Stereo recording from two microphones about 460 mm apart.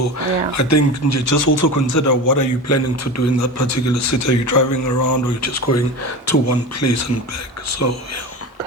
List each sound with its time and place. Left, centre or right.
0.2 s speech: left